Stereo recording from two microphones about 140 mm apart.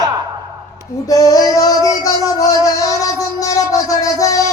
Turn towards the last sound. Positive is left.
turn(degrees=25)  # may be behind; listen again after turning